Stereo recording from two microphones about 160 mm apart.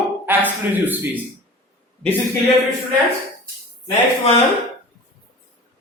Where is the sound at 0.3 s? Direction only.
10° right (ahead or behind).